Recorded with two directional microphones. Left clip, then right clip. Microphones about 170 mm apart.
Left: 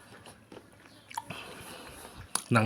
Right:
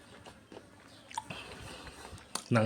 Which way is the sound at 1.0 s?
15° left (ahead or behind).